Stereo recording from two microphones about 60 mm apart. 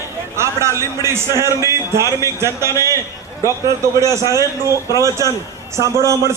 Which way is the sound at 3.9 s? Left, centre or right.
Right.